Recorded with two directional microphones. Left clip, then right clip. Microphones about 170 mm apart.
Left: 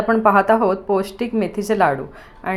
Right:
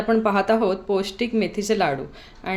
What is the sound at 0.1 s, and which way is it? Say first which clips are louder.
A woman's voice: left 5 dB; centre (ahead or behind).